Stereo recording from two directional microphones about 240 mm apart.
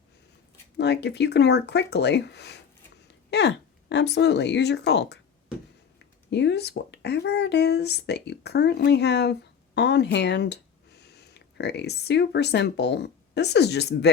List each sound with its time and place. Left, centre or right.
0.8 s speech: left